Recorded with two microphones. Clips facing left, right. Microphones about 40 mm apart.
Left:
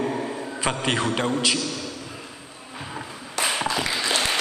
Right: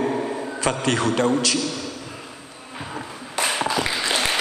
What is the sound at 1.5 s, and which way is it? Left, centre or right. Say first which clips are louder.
Speech: right 3 dB; centre.